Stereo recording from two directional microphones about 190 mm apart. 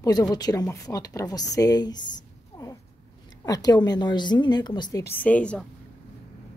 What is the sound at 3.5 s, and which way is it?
A woman's voice, 20° left (ahead or behind).